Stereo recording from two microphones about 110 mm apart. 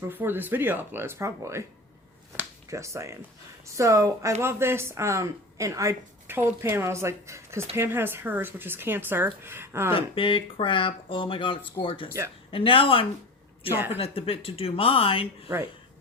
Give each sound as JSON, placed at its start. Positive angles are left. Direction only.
{"t": 0.1, "sound": "speech", "side_deg": -20}
{"t": 2.6, "sound": "speech", "side_deg": -25}
{"t": 9.9, "sound": "speech", "side_deg": 55}